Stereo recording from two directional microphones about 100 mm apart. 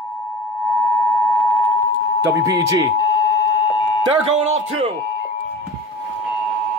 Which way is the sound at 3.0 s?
45° left (ahead or behind).